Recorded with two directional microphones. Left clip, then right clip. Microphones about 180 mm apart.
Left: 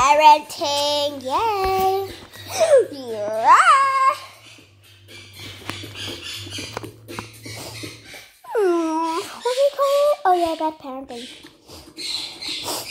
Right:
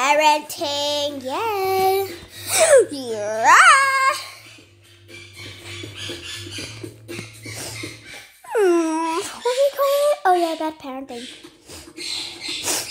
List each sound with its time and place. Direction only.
0.0 s child singing: 25° right (ahead or behind)
2.6 s a child's voice: 40° right (ahead or behind)
8.5 s a sound: 20° right (ahead or behind)